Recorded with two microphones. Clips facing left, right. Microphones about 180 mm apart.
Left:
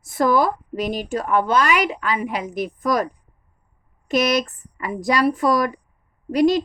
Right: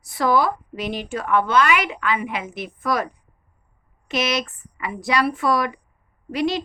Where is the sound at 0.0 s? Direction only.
45° left (ahead or behind).